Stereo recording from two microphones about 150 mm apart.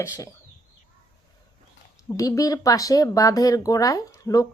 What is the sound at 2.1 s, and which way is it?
Speech, 20° left (ahead or behind).